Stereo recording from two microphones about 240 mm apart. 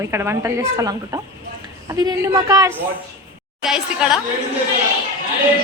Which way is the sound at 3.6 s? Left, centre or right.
Centre.